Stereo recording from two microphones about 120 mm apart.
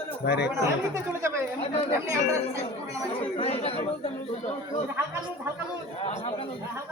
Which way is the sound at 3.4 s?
55° left (ahead or behind).